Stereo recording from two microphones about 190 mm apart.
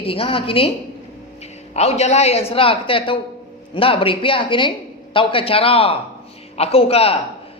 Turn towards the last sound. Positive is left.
turn(degrees=30)  # may be behind; listen again after turning